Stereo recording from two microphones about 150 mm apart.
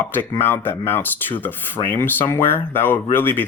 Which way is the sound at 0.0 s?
15° left (ahead or behind).